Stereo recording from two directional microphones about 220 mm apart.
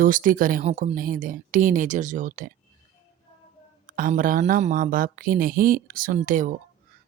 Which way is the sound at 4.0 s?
40° right (ahead or behind).